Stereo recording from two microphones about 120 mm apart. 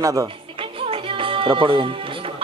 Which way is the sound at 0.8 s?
50° right (ahead or behind).